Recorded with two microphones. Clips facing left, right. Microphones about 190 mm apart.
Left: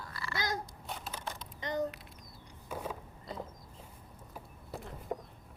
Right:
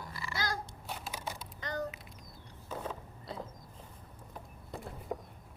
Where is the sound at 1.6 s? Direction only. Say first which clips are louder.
Left 4 dB; 20° left (ahead or behind).